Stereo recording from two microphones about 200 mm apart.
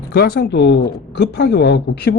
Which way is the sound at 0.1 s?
50° left (ahead or behind).